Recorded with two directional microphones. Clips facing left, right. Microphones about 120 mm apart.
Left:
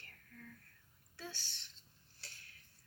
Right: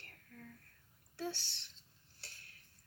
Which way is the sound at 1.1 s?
70° right (ahead or behind).